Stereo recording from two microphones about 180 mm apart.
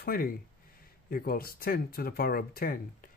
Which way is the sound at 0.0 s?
55° left (ahead or behind).